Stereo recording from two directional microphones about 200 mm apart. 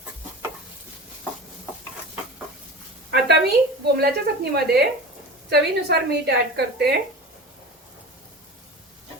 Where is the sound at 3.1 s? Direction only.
60° right (ahead or behind).